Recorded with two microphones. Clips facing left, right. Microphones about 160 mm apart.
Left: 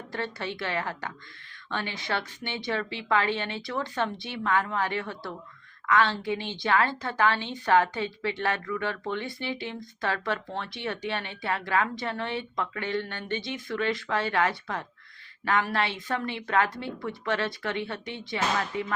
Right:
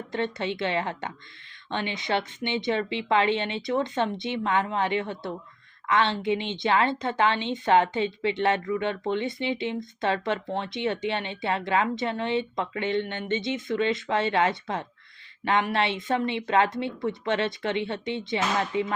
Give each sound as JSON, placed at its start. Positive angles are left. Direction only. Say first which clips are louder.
{"t": 0.1, "sound": "a woman's voice", "louder": "right 5 dB", "side_deg": -20}